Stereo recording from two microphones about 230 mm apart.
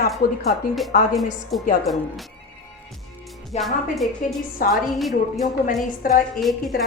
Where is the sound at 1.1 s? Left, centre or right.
Centre.